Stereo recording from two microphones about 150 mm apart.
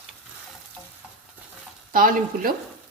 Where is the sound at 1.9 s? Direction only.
70° right (ahead or behind).